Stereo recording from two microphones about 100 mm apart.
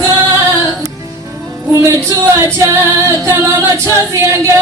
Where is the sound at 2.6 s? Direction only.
30° right (ahead or behind).